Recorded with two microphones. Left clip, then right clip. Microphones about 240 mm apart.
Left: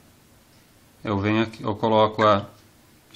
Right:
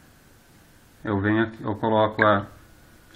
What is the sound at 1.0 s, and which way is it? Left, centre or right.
Speech, left.